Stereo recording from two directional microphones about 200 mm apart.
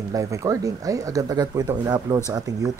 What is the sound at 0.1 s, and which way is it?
Speech, 15° right (ahead or behind).